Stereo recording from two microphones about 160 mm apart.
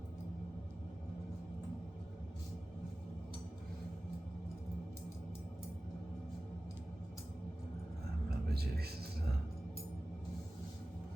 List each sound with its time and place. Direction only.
8.4 s music: 80° right